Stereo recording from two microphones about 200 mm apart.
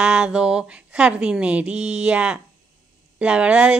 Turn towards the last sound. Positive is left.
turn(degrees=-5)  # may be behind; listen again after turning